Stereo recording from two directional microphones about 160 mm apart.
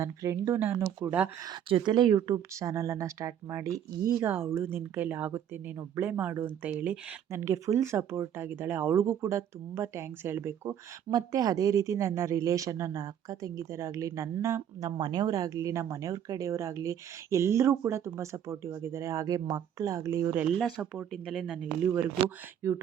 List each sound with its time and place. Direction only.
0.0 s speech: 20° right (ahead or behind)
1.7 s speech: 30° right (ahead or behind)
20.5 s speech: centre (ahead or behind)
22.6 s speech: 15° right (ahead or behind)